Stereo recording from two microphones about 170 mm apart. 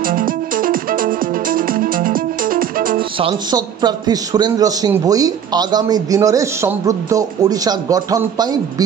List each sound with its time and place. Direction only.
0.0 s music: 55° right (ahead or behind)
3.2 s a man's voice: 30° right (ahead or behind)